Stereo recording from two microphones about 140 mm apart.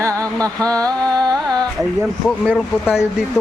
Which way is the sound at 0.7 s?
25° right (ahead or behind).